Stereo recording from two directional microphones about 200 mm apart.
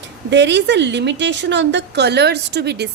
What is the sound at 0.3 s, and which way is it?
A woman's voice, 60° right (ahead or behind).